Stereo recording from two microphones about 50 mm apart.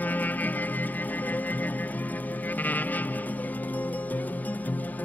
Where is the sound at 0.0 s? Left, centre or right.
Left.